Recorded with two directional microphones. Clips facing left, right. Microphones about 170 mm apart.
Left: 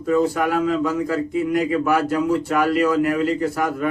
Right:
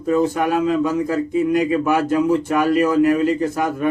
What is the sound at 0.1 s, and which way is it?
Speech, 20° right (ahead or behind).